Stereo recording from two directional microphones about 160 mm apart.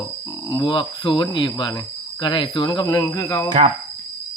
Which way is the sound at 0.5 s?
30° left (ahead or behind).